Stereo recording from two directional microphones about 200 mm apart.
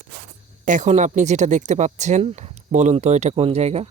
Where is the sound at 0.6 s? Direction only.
40° right (ahead or behind).